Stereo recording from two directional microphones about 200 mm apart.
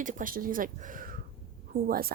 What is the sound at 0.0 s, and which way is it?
Speech, 40° right (ahead or behind).